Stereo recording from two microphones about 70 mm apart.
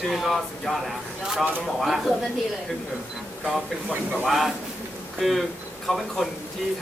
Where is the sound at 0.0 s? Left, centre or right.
Centre.